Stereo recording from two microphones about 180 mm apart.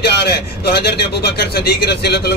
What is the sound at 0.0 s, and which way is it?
A man's voice, 65° left (ahead or behind).